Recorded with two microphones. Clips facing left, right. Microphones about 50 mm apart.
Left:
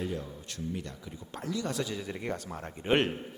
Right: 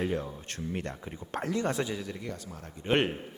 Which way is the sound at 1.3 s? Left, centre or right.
Right.